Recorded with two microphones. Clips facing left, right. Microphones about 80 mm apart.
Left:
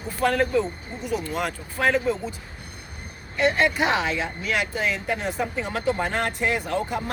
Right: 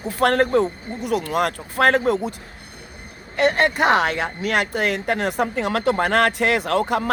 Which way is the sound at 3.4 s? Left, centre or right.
Right.